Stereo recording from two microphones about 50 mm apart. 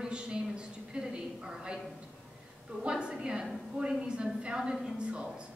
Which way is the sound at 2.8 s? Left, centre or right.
Centre.